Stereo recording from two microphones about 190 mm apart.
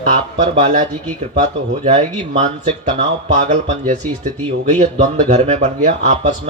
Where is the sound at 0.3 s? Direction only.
40° right (ahead or behind).